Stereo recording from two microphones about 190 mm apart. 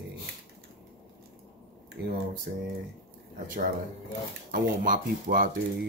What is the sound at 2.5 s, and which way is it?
Speech, 50° right (ahead or behind).